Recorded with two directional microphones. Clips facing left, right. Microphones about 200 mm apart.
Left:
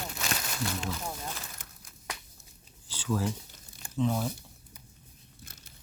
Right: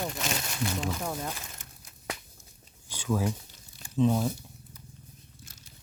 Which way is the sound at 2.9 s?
15° right (ahead or behind).